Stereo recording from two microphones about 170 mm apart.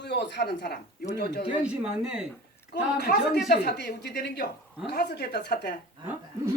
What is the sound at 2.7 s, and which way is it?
Speech, 70° left (ahead or behind).